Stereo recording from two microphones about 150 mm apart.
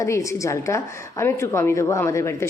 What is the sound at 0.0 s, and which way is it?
A woman's voice, 20° left (ahead or behind).